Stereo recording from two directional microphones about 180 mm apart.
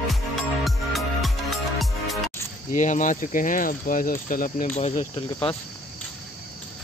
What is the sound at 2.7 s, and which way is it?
Speech, 45° left (ahead or behind).